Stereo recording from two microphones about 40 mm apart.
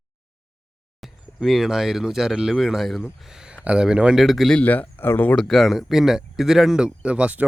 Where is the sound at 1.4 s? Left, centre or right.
Centre.